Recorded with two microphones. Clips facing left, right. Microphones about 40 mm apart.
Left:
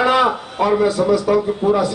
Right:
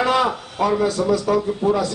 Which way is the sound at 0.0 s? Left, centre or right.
Left.